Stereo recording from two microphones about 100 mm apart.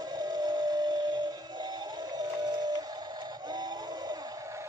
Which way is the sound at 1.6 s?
45° right (ahead or behind).